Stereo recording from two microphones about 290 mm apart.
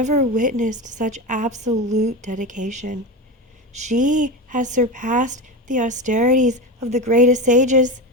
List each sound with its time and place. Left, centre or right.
0.0 s speech: right